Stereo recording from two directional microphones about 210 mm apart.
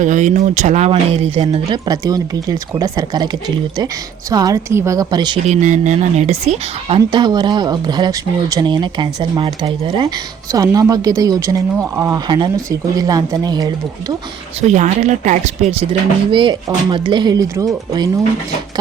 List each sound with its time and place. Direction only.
0.0 s a woman's voice: 35° right (ahead or behind); by 3.2 s 15° right (ahead or behind)
4.3 s speech: 15° right (ahead or behind)
5.5 s a woman's voice: 35° right (ahead or behind); by 13.7 s 20° right (ahead or behind)
14.6 s a woman's voice: 35° right (ahead or behind); by 17.7 s 20° right (ahead or behind)